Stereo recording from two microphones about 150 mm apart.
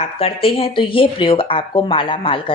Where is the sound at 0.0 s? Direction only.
40° left (ahead or behind).